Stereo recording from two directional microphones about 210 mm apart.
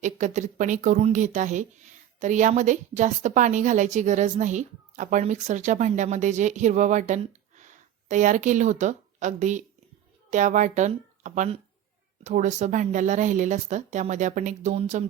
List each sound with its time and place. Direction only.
0.0 s a woman's voice: 35° right (ahead or behind)